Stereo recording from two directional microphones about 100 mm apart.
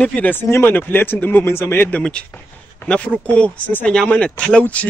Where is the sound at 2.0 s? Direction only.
10° left (ahead or behind).